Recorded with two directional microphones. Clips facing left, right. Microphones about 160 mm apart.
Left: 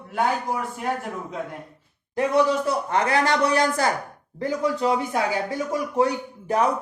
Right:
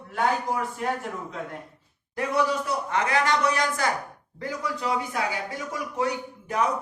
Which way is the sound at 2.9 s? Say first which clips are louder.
Left 1 dB; 35° left (ahead or behind).